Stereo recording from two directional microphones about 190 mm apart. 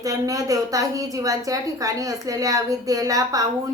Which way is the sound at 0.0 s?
20° right (ahead or behind).